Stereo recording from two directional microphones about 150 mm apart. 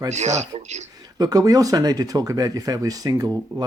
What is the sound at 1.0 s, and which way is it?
Speech, 25° right (ahead or behind).